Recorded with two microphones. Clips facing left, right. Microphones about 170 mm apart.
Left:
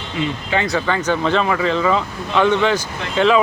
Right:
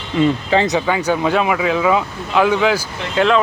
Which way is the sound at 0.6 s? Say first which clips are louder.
Right 2 dB; 15° right (ahead or behind).